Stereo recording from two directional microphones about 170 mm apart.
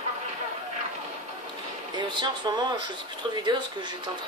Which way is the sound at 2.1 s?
25° right (ahead or behind).